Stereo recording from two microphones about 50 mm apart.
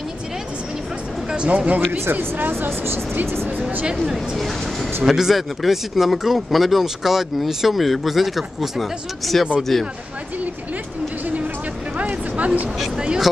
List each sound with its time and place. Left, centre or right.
1.3 s speech: right
1.9 s speech: right
2.6 s speech: right
5.0 s speech: centre
12.0 s a sound: right
12.9 s speech: centre